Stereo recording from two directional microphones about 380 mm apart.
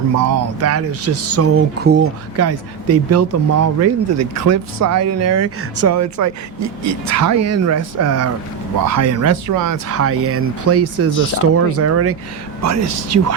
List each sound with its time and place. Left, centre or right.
0.2 s speech: right
2.4 s speech: right